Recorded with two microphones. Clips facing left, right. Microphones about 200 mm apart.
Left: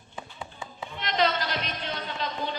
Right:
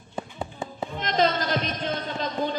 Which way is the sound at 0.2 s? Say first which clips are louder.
Right 7 dB; 40° right (ahead or behind).